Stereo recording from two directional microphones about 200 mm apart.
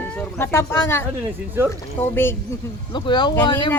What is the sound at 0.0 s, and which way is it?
Speech, 10° left (ahead or behind).